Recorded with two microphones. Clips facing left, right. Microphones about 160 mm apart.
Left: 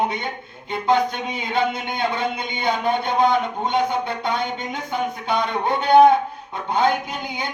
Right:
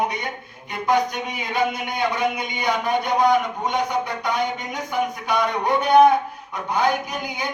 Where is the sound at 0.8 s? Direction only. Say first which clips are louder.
Left 1 dB; 25° left (ahead or behind).